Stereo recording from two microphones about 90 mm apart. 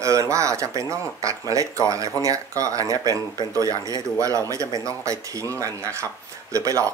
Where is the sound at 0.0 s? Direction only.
35° right (ahead or behind).